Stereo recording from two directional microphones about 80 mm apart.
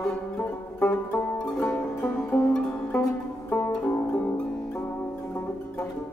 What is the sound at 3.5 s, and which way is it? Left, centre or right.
Music, left.